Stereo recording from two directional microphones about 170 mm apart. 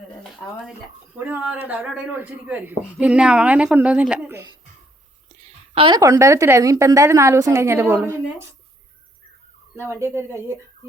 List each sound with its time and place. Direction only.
1.2 s a man's voice: 10° right (ahead or behind)
5.3 s a man's voice: 40° right (ahead or behind); by 8.4 s 15° right (ahead or behind)
9.7 s a man's voice: 15° right (ahead or behind)